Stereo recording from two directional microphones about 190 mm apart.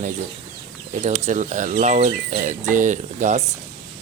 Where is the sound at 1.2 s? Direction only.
40° right (ahead or behind).